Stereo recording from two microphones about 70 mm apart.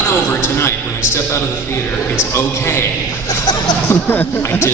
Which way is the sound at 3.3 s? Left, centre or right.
Left.